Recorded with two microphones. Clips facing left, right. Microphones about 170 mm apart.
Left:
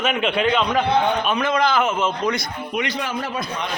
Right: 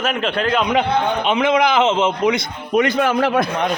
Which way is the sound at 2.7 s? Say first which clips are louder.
Right 10 dB; 50° right (ahead or behind).